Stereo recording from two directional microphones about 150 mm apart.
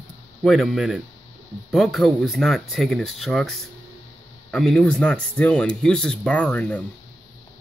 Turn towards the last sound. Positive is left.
turn(degrees=10)  # may be behind; listen again after turning